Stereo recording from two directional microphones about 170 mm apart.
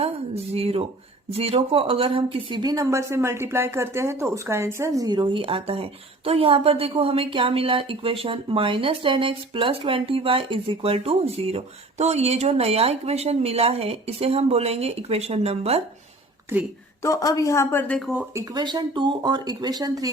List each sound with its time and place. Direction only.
0.5 s speech: 35° right (ahead or behind)
17.0 s speech: 20° left (ahead or behind)
18.1 s speech: 5° right (ahead or behind)
18.5 s speech: 25° right (ahead or behind)